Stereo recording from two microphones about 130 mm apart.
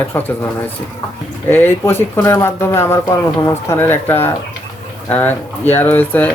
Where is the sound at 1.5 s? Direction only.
15° left (ahead or behind).